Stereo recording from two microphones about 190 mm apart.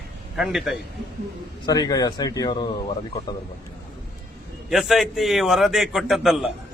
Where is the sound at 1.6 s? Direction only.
20° left (ahead or behind).